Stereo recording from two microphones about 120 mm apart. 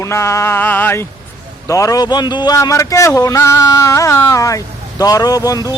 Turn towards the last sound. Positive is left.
turn(degrees=30)  # may be behind; listen again after turning